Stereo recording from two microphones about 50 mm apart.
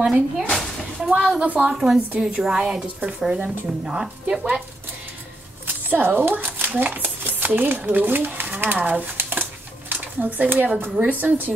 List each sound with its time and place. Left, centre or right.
0.0 s a woman's voice: centre
0.5 s a sound: centre
1.0 s a woman's voice: right
1.7 s a woman's voice: centre
5.7 s speech: right
9.1 s a sound: right
10.1 s speech: right